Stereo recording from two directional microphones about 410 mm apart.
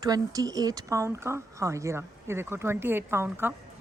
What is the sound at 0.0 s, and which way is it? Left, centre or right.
Speech, centre.